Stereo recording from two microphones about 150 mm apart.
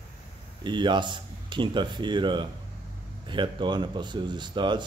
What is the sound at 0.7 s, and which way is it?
Speech, 30° right (ahead or behind).